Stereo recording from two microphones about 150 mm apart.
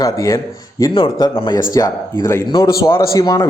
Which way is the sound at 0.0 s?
20° left (ahead or behind).